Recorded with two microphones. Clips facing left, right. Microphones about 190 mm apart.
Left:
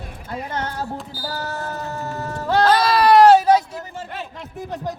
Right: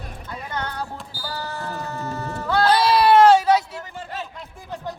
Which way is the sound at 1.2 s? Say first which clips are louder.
Left 1 dB; 40° left (ahead or behind).